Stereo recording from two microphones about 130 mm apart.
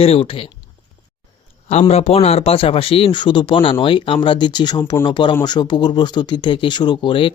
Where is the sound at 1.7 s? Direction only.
55° left (ahead or behind).